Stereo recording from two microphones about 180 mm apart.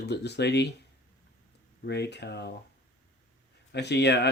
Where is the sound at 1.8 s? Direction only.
70° left (ahead or behind).